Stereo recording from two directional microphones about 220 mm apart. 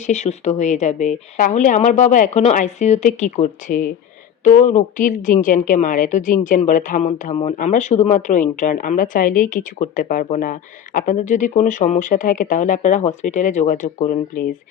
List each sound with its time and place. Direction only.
0.0 s a woman's voice: 30° left (ahead or behind)